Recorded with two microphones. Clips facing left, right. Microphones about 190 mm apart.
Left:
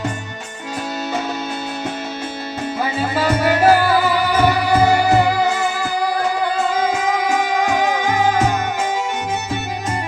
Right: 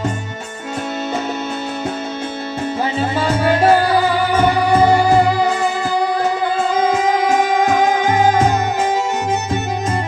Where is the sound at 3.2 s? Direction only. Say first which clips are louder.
Even; 25° right (ahead or behind).